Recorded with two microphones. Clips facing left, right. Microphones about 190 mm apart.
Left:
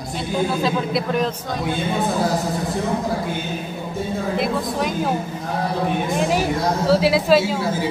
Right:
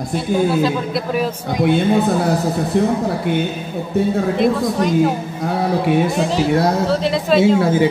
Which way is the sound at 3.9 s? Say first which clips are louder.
Right 11 dB; 65° right (ahead or behind).